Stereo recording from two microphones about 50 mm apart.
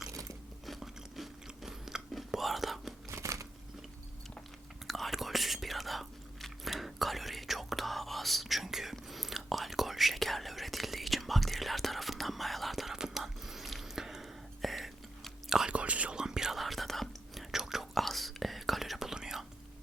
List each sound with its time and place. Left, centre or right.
0.6 s biting: centre
3.1 s a sound: right
4.9 s whispering: centre
15.7 s whispering: right
16.1 s whispering: centre
17.5 s whispering: centre